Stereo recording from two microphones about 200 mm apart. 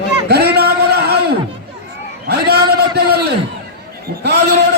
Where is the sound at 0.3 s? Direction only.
55° right (ahead or behind).